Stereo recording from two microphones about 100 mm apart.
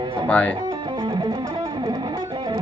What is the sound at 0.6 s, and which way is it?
Music, 50° right (ahead or behind).